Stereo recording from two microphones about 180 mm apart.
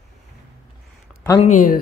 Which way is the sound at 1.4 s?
45° left (ahead or behind).